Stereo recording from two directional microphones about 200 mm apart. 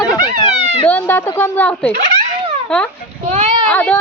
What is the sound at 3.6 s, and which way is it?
Speech, 5° left (ahead or behind).